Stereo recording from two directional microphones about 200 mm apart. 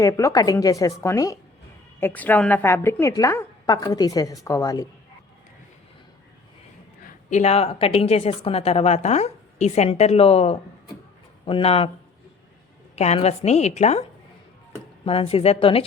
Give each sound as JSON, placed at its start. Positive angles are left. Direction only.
{"t": 0.0, "sound": "a woman's voice", "side_deg": 15}
{"t": 7.0, "sound": "a woman's voice", "side_deg": 35}
{"t": 13.0, "sound": "a woman's voice", "side_deg": 30}
{"t": 15.0, "sound": "a woman's voice", "side_deg": 30}